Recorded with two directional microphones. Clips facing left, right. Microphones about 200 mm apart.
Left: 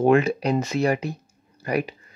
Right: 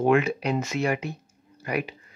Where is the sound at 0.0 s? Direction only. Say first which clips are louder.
Left 3 dB; 35° left (ahead or behind).